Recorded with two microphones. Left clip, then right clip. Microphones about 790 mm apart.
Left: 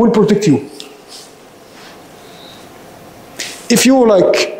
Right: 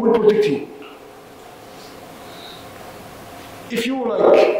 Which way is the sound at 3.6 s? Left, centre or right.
Left.